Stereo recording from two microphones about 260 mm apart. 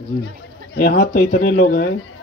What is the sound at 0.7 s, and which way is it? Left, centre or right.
Speech, left.